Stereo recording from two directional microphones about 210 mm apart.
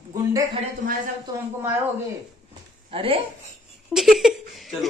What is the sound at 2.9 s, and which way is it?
Speech, 25° right (ahead or behind).